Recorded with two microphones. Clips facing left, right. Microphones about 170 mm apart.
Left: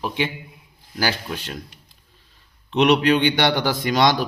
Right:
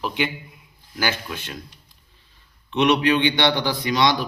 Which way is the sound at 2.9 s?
45° left (ahead or behind).